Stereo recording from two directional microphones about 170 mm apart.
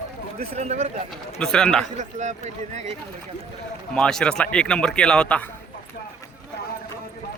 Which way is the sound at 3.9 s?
5° left (ahead or behind).